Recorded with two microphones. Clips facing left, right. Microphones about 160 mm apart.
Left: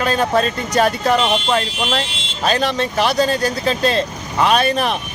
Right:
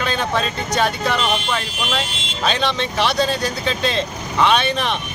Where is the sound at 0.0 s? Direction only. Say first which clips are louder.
Left 5 dB; 40° left (ahead or behind).